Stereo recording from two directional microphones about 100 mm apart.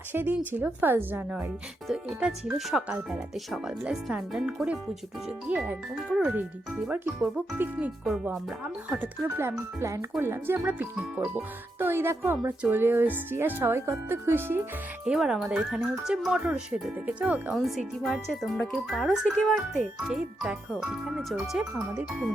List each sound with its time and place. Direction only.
0.1 s speech: 20° right (ahead or behind)
1.9 s speech: 5° right (ahead or behind)
11.8 s speech: 25° right (ahead or behind)
15.0 s speech: 5° right (ahead or behind)
17.6 s speech: centre (ahead or behind)